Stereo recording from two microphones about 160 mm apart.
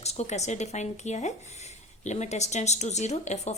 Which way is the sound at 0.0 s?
45° left (ahead or behind).